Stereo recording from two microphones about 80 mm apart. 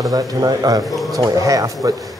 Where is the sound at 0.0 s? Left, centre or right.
Right.